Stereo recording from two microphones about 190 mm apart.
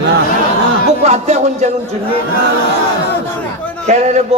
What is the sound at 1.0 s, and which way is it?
Speech, 35° right (ahead or behind).